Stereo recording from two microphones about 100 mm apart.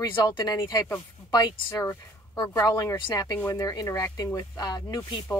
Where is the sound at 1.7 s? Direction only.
25° left (ahead or behind).